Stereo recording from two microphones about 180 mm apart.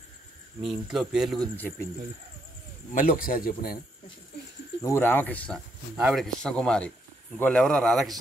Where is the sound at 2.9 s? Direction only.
50° left (ahead or behind).